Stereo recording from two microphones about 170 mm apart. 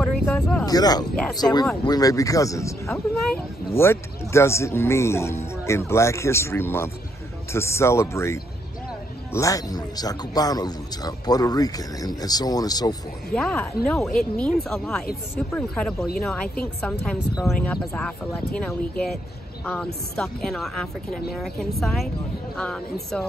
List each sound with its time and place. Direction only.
0.0 s a sound: 5° left (ahead or behind)
0.7 s speech: 20° left (ahead or behind)
2.9 s speech: centre (ahead or behind)
3.7 s speech: 15° left (ahead or behind)
13.3 s speech: 5° left (ahead or behind)
17.5 s speech: 70° left (ahead or behind)
17.9 s speech: 5° left (ahead or behind)